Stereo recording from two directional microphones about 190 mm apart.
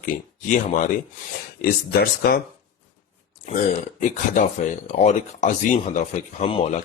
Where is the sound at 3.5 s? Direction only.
40° left (ahead or behind).